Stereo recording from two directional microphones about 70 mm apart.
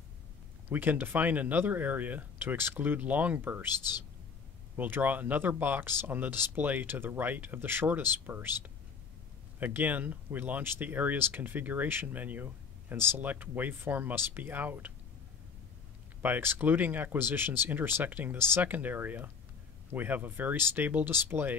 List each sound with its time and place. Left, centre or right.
0.7 s speech: right
4.7 s speech: right
16.2 s speech: right